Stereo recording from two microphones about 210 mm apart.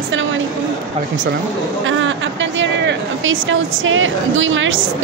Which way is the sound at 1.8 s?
65° right (ahead or behind).